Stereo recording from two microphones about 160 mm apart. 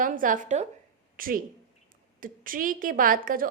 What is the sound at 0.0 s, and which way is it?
Speech, 55° right (ahead or behind).